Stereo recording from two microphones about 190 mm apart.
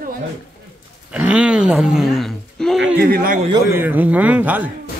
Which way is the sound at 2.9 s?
50° right (ahead or behind).